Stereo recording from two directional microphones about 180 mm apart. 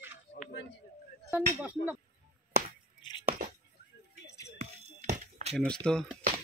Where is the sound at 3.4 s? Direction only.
55° right (ahead or behind).